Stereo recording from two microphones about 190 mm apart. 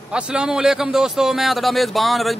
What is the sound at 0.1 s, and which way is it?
Speech, 5° right (ahead or behind).